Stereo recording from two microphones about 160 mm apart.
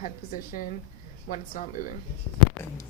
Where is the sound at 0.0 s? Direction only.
60° left (ahead or behind).